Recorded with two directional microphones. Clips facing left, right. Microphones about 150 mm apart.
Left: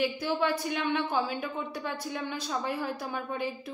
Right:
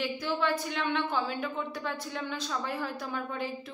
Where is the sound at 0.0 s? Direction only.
15° left (ahead or behind).